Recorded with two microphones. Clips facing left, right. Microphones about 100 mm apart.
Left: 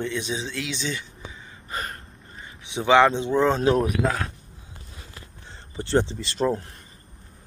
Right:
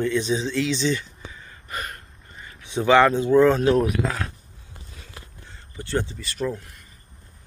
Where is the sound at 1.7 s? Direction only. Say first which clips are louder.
Left 1 dB; 30° left (ahead or behind).